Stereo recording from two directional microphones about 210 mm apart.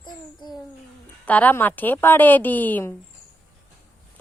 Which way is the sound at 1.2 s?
5° left (ahead or behind).